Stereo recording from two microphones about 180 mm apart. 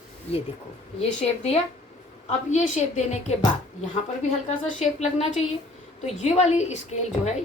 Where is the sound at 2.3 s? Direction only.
40° left (ahead or behind).